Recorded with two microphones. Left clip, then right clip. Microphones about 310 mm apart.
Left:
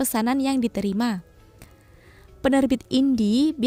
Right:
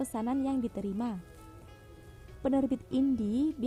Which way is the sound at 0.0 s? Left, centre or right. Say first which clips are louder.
Left 10 dB; left.